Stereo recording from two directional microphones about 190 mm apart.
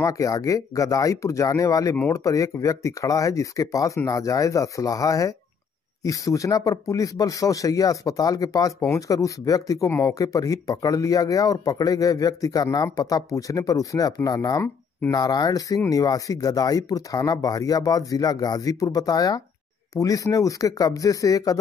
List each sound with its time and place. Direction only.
0.0 s speech: 15° left (ahead or behind)